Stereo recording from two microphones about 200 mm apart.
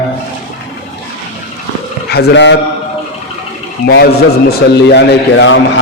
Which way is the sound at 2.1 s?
55° left (ahead or behind).